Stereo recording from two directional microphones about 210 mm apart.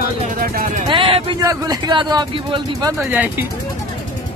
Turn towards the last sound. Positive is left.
turn(degrees=-10)  # may be behind; listen again after turning